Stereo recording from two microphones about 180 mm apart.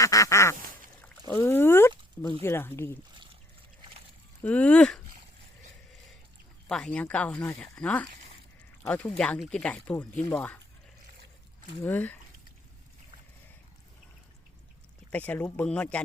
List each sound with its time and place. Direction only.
0.0 s speech: 20° left (ahead or behind)
4.4 s speech: 5° left (ahead or behind)
6.7 s speech: 5° left (ahead or behind)
11.8 s speech: 10° left (ahead or behind)
15.1 s speech: 10° left (ahead or behind)